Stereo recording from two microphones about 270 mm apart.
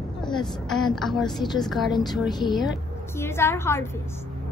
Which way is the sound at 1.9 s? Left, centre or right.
Centre.